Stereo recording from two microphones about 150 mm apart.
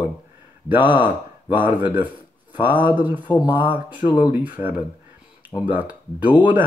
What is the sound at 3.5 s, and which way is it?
Speech, 10° right (ahead or behind).